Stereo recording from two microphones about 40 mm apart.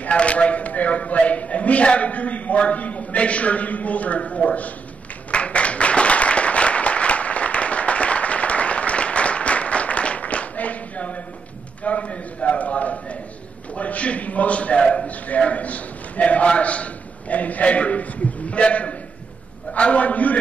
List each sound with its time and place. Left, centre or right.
0.0 s speech: left
5.3 s applause: left
11.8 s a man's voice: left